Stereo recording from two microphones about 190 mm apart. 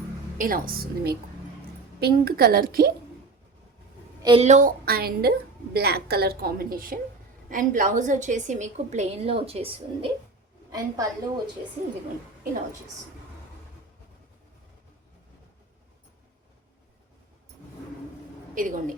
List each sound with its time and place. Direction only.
0.3 s a woman's voice: 50° right (ahead or behind)
4.2 s a woman's voice: 25° right (ahead or behind)
4.4 s a woman's voice: 40° right (ahead or behind)
10.7 s a woman's voice: 20° right (ahead or behind)
18.5 s a woman's voice: 45° right (ahead or behind)